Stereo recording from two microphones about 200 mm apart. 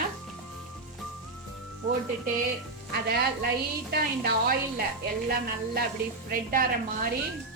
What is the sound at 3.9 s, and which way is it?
Speech, 45° right (ahead or behind).